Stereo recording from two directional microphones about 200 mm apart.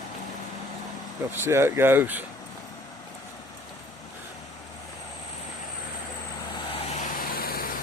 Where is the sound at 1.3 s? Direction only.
10° right (ahead or behind).